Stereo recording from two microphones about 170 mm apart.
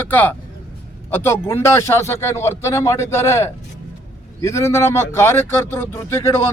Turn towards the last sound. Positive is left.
turn(degrees=15)  # may be behind; listen again after turning